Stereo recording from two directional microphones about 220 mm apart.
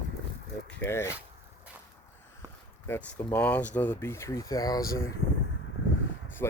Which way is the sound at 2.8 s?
10° left (ahead or behind).